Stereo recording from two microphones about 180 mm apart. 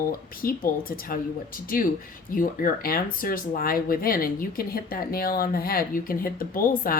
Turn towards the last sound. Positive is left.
turn(degrees=50)  # may be behind; listen again after turning